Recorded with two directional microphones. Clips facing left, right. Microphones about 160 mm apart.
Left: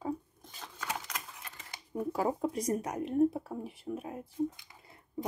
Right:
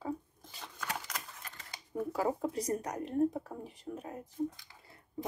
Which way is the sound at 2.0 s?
20° left (ahead or behind).